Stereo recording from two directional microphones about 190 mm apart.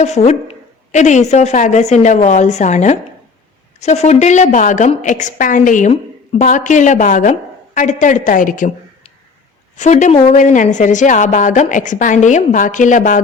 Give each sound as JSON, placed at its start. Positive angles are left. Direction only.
{"t": 0.0, "sound": "a woman's voice", "side_deg": 35}
{"t": 9.7, "sound": "a woman's voice", "side_deg": 40}